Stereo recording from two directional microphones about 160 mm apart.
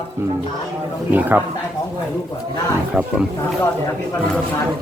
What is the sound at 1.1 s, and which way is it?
Speech, 10° right (ahead or behind).